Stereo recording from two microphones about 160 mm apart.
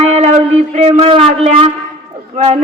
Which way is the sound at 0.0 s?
40° right (ahead or behind).